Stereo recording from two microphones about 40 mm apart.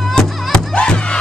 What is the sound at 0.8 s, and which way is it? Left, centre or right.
Music, left.